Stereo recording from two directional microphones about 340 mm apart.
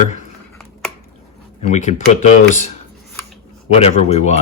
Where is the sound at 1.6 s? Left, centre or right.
Left.